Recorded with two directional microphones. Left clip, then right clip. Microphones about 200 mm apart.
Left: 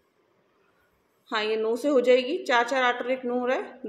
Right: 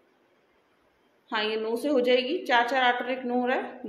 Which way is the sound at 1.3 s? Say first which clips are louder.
Left 2 dB; 30° left (ahead or behind).